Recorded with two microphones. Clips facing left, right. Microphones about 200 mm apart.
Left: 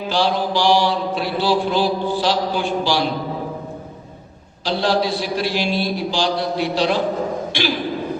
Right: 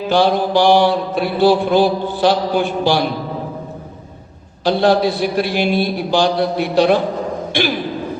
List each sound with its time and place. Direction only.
0.1 s mantra: 55° right (ahead or behind)
4.6 s mantra: 55° right (ahead or behind)